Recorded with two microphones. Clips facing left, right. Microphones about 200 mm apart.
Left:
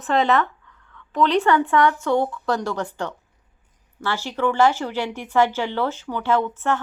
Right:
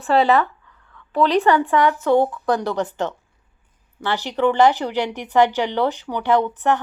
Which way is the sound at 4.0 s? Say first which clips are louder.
Right 3 dB; 20° right (ahead or behind).